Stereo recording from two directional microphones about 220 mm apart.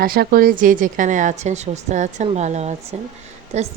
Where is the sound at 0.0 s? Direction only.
40° right (ahead or behind).